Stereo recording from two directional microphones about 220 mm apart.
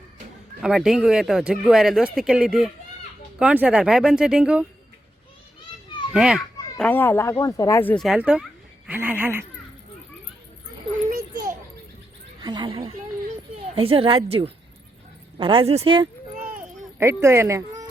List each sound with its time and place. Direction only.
0.6 s speech: centre (ahead or behind)
6.1 s speech: centre (ahead or behind)
11.1 s children playing: 40° right (ahead or behind)
12.4 s speech: 20° right (ahead or behind)
16.6 s a sound: 10° right (ahead or behind)